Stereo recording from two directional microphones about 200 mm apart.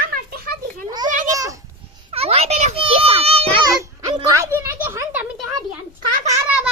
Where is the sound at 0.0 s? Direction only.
50° right (ahead or behind).